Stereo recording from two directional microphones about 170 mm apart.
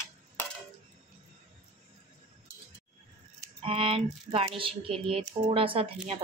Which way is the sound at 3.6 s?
30° right (ahead or behind).